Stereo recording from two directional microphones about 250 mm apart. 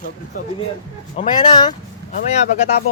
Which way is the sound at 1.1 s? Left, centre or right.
Centre.